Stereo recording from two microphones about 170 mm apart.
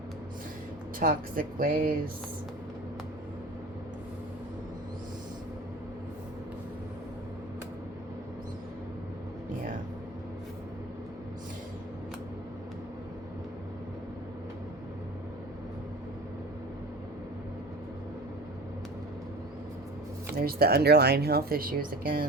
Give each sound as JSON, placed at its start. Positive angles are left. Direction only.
{"t": 0.9, "sound": "speech", "side_deg": -55}
{"t": 20.4, "sound": "speech", "side_deg": -65}